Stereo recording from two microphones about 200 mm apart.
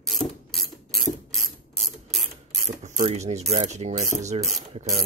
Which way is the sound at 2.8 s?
35° right (ahead or behind).